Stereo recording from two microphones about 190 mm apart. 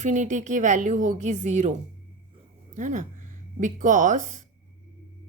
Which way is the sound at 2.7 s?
40° right (ahead or behind).